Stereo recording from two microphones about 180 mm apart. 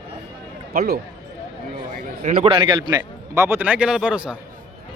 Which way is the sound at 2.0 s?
35° right (ahead or behind).